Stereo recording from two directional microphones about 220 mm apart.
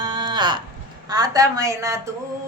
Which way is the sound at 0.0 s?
20° right (ahead or behind).